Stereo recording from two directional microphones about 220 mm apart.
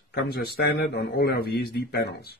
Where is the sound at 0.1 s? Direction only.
45° left (ahead or behind).